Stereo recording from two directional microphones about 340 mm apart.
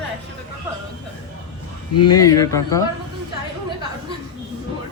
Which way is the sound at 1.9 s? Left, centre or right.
Left.